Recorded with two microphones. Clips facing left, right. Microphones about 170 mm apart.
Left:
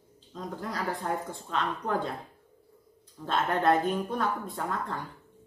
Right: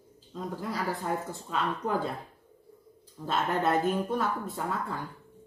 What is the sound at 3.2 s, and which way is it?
Speech, 5° right (ahead or behind).